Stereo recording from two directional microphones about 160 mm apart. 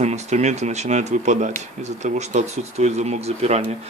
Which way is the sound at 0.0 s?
45° right (ahead or behind).